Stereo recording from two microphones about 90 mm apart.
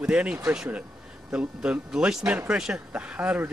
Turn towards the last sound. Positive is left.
turn(degrees=-15)  # may be behind; listen again after turning